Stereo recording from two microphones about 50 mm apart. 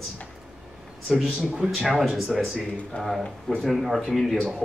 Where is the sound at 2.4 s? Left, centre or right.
Centre.